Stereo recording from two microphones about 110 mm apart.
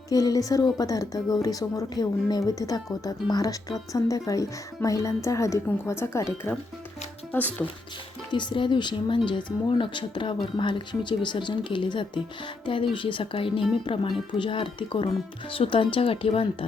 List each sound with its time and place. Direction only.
0.1 s speech: 35° left (ahead or behind); by 7.7 s 15° left (ahead or behind)
8.3 s speech: 45° left (ahead or behind)